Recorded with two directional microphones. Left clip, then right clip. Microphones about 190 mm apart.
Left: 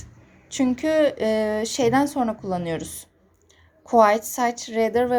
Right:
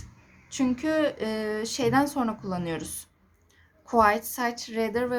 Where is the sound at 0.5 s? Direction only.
15° left (ahead or behind).